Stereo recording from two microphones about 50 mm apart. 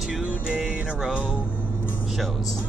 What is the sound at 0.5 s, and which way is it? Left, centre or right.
Music, centre.